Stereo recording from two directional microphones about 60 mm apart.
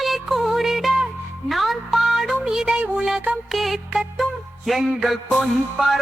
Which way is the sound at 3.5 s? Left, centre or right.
Centre.